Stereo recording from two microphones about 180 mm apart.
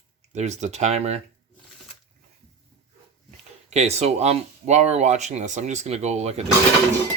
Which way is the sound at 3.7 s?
35° right (ahead or behind).